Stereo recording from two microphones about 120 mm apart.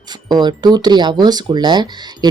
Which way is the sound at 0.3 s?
35° right (ahead or behind).